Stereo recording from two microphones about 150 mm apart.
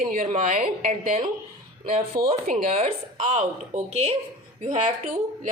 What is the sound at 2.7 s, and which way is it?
Speech, 45° right (ahead or behind).